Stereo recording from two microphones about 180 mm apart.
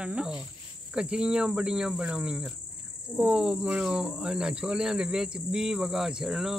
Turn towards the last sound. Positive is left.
turn(degrees=0)  # may be behind; listen again after turning